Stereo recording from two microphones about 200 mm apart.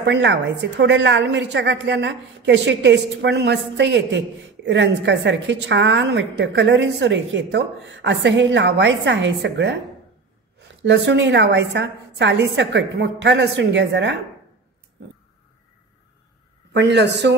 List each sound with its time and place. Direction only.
0.0 s a woman's voice: 60° right (ahead or behind)
10.8 s a woman's voice: 60° right (ahead or behind)
16.7 s a woman's voice: 60° right (ahead or behind)